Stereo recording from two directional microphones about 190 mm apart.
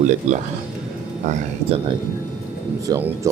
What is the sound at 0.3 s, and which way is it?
Speech, 40° right (ahead or behind).